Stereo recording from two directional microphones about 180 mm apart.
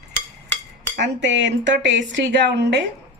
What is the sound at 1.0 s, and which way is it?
Speech, 90° right.